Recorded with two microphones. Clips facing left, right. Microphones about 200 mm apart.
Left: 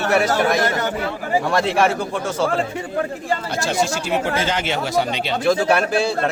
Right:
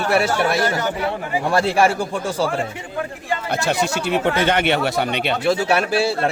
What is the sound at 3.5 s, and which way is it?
Speech, 60° right (ahead or behind).